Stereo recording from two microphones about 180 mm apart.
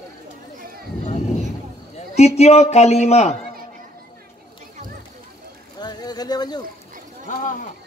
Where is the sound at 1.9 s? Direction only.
35° left (ahead or behind).